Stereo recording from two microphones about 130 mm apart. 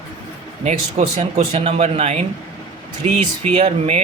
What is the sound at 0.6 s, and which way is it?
Speech, 55° right (ahead or behind).